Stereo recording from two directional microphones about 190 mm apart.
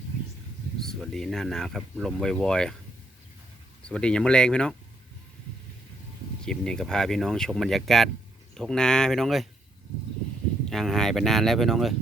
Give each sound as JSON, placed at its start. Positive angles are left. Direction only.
{"t": 0.8, "sound": "speech", "side_deg": 0}
{"t": 3.8, "sound": "speech", "side_deg": 5}
{"t": 6.4, "sound": "speech", "side_deg": 5}
{"t": 10.7, "sound": "speech", "side_deg": 0}